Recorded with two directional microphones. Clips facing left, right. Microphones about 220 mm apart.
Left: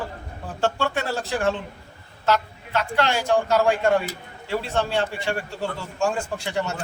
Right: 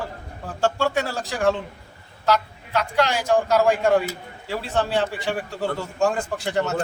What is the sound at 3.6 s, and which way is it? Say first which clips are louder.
Speech: right 2 dB; centre (ahead or behind).